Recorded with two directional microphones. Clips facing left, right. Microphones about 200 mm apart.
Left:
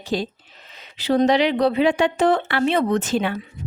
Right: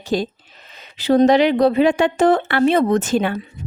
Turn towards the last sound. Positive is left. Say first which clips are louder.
# right 3 dB
turn(degrees=-50)  # may be behind; listen again after turning